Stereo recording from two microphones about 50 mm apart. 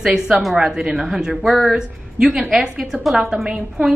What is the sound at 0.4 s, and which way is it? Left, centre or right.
Speech, centre.